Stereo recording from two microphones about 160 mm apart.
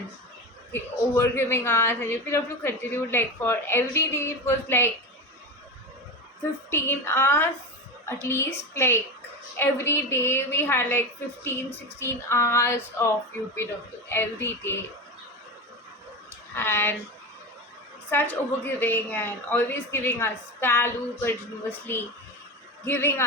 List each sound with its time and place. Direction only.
0.7 s a woman's voice: 15° left (ahead or behind)
6.7 s a woman's voice: 15° left (ahead or behind)
14.1 s a woman's voice: 15° left (ahead or behind)
16.6 s a woman's voice: 15° left (ahead or behind)
18.1 s a woman's voice: 10° left (ahead or behind)